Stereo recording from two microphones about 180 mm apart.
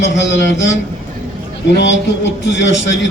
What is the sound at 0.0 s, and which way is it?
A man's voice, 80° left.